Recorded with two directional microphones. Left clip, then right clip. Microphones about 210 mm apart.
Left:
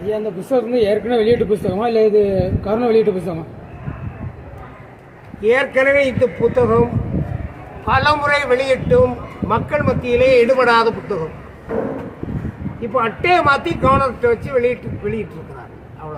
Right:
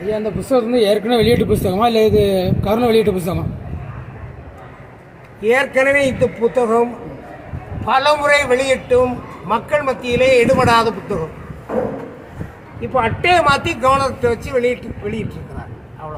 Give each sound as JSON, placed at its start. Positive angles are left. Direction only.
{"t": 0.1, "sound": "speech", "side_deg": -30}
{"t": 5.4, "sound": "a man's voice", "side_deg": 0}
{"t": 7.9, "sound": "a man's voice", "side_deg": 0}
{"t": 12.8, "sound": "a man's voice", "side_deg": -5}